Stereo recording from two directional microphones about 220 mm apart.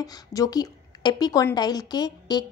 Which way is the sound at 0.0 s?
15° left (ahead or behind).